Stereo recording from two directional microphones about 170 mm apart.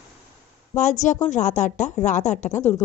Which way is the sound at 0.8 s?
45° left (ahead or behind).